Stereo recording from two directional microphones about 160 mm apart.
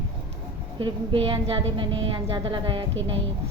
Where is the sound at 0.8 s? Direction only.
35° right (ahead or behind).